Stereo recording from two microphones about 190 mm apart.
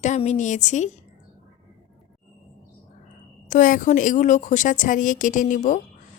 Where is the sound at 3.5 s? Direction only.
45° left (ahead or behind).